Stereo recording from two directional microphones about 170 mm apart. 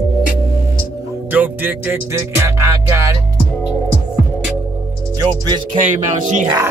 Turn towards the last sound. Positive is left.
turn(degrees=-20)  # may be behind; listen again after turning